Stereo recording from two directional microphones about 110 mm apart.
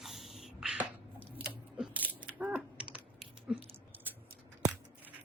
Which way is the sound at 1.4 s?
10° right (ahead or behind).